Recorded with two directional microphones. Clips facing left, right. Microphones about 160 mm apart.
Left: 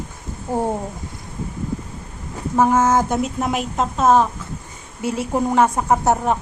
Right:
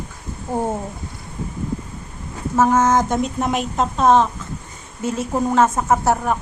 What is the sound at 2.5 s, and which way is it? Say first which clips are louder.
A woman's voice: even; 10° left (ahead or behind).